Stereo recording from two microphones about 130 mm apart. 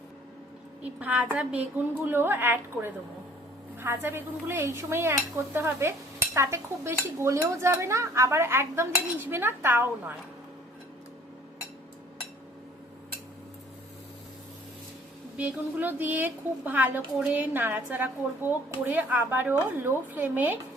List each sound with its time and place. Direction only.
0.8 s a woman's voice: 10° right (ahead or behind)
3.8 s dishes: 20° right (ahead or behind)
15.4 s a woman's voice: 15° right (ahead or behind)